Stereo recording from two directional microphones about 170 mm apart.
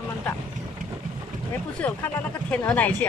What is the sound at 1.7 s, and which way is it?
Speech, 10° left (ahead or behind).